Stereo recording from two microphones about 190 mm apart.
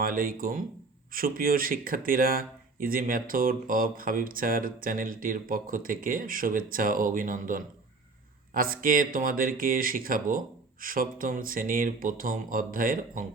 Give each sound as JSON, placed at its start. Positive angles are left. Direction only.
{"t": 0.0, "sound": "speech", "side_deg": -50}